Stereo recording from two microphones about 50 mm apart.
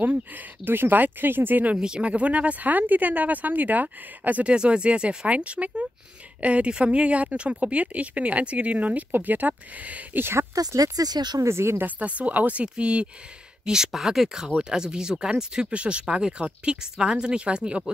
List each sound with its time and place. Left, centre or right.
0.7 s speech: right
1.8 s speech: centre
10.1 s speech: right
11.4 s speech: right
11.8 s speech: right
13.7 s speech: centre
14.6 s speech: centre